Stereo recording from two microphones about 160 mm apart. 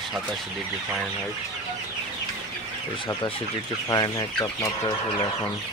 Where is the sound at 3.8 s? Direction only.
25° left (ahead or behind).